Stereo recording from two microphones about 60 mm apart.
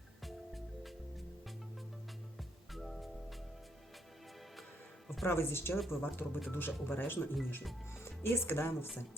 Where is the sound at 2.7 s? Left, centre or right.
Centre.